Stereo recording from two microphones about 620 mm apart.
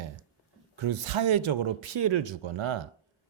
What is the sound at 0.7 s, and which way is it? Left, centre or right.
Speech, right.